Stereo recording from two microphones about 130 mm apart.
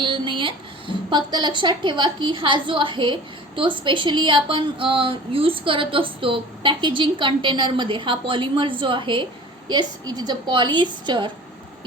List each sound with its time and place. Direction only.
0.0 s a woman's voice: 40° right (ahead or behind)